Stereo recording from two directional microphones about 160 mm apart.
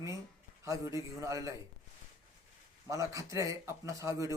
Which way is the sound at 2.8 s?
20° right (ahead or behind).